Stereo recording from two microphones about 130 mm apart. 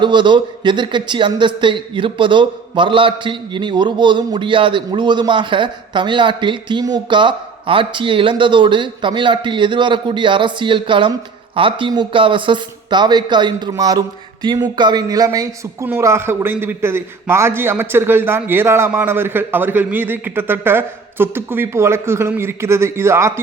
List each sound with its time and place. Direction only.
0.0 s a man's voice: 35° right (ahead or behind); by 23.4 s 20° right (ahead or behind)